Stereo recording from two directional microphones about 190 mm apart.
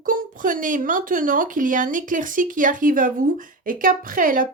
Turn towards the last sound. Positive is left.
turn(degrees=-45)  # may be behind; listen again after turning